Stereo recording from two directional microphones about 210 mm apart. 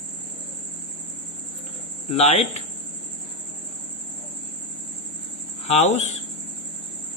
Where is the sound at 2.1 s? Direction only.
30° left (ahead or behind).